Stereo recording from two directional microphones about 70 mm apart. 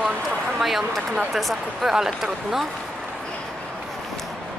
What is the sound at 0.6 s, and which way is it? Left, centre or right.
Speech, centre.